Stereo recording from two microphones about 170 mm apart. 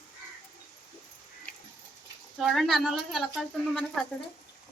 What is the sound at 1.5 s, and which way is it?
Tick-tock, 5° left (ahead or behind).